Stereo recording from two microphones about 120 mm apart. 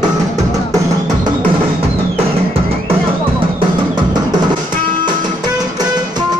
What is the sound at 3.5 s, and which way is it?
Music, 35° right (ahead or behind).